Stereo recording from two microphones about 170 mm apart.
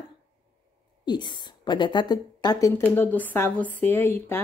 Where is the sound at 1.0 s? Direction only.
25° left (ahead or behind).